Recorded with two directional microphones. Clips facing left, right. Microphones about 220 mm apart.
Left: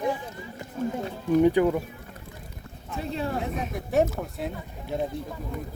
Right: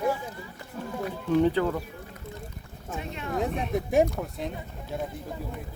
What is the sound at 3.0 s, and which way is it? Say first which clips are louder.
Speech: left 3 dB; 35° left (ahead or behind).